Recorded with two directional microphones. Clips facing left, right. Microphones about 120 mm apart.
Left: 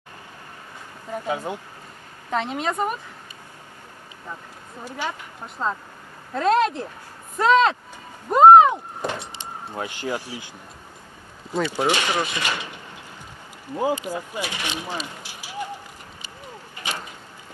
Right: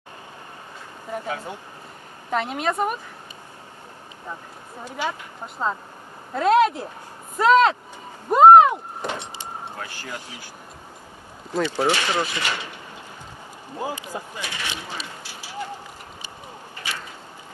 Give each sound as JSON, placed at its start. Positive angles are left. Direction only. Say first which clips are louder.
{"t": 1.2, "sound": "speech", "louder": "left 4 dB", "side_deg": 15}
{"t": 2.3, "sound": "a woman's voice", "louder": "right 1 dB", "side_deg": -5}
{"t": 5.6, "sound": "a woman's voice", "louder": "even", "side_deg": -5}
{"t": 8.3, "sound": "a sound", "louder": "even", "side_deg": -5}
{"t": 9.8, "sound": "speech", "louder": "left 7 dB", "side_deg": 20}
{"t": 11.5, "sound": "speech", "louder": "even", "side_deg": 10}
{"t": 13.7, "sound": "speech", "louder": "left 6 dB", "side_deg": 20}
{"t": 16.8, "sound": "a sound", "louder": "left 2 dB", "side_deg": 20}